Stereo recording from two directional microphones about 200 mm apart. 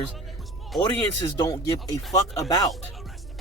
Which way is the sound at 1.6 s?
20° left (ahead or behind).